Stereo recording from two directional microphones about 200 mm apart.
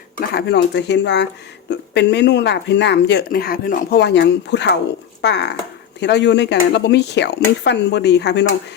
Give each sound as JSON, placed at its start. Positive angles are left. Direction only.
{"t": 0.2, "sound": "speech", "side_deg": 55}